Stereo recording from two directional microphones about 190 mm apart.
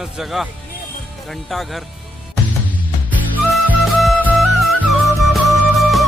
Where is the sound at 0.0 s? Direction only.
Centre (ahead or behind).